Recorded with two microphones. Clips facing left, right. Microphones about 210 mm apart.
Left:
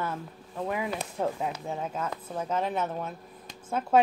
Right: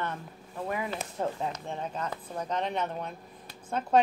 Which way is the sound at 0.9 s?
Centre (ahead or behind).